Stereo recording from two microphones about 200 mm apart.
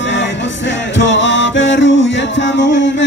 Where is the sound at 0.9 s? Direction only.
65° left (ahead or behind).